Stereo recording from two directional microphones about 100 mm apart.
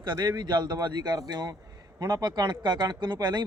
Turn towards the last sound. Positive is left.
turn(degrees=-50)  # may be behind; listen again after turning